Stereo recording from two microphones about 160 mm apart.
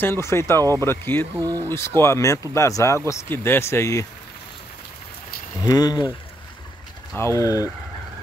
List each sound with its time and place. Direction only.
0.0 s speech: 15° left (ahead or behind)
1.4 s speech: 25° right (ahead or behind)
1.7 s speech: 15° left (ahead or behind)
5.7 s speech: 25° left (ahead or behind)
7.2 s speech: 20° left (ahead or behind)